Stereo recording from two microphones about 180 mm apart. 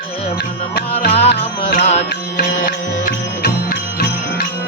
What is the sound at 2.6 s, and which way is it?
Music, 55° left (ahead or behind).